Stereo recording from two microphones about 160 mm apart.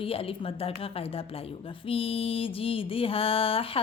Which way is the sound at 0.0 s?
35° left (ahead or behind).